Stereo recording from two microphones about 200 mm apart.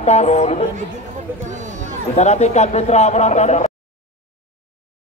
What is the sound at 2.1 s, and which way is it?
Speech, 35° left (ahead or behind).